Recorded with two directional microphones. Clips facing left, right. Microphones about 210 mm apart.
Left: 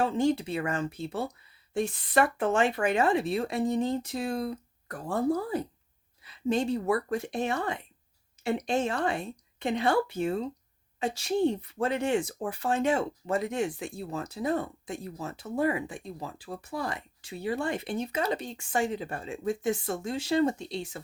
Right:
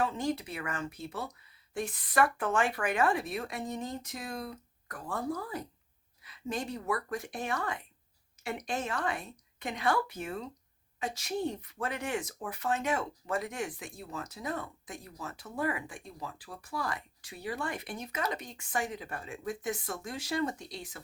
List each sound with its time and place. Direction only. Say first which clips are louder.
0.0 s speech: left 6 dB; 25° left (ahead or behind)